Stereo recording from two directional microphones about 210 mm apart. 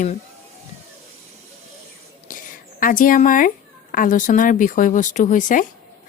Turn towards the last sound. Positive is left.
turn(degrees=40)  # may be behind; listen again after turning